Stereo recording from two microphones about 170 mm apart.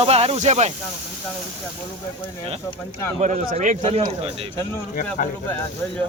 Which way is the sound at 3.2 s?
45° right (ahead or behind).